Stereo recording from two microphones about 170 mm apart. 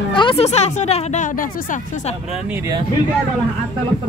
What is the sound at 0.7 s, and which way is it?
Speech, 40° left (ahead or behind).